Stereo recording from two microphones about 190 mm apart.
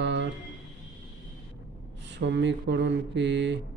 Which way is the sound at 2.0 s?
65° right (ahead or behind).